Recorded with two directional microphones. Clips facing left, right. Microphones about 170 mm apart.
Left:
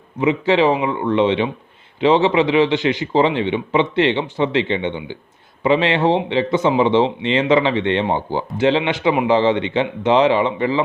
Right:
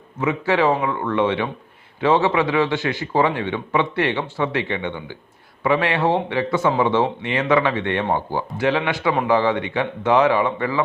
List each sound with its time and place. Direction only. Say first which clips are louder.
0.2 s a man's voice: left 4 dB; 20° left (ahead or behind)